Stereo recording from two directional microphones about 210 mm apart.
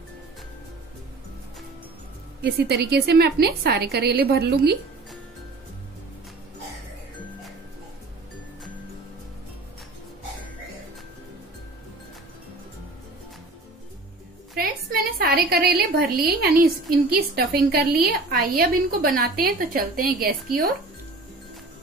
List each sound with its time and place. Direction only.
2.4 s a woman's voice: 50° right (ahead or behind)
15.1 s a woman's voice: 45° right (ahead or behind)